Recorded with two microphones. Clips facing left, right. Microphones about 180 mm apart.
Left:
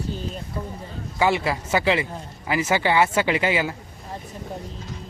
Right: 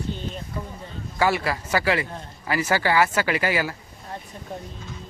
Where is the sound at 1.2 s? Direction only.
20° left (ahead or behind).